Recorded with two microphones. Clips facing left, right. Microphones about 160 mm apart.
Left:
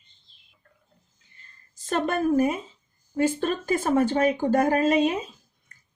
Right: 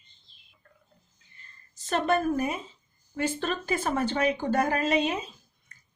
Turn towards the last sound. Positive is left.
turn(degrees=45)  # may be behind; listen again after turning